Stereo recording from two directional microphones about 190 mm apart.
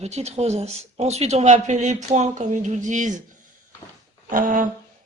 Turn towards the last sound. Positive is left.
turn(degrees=-45)  # may be behind; listen again after turning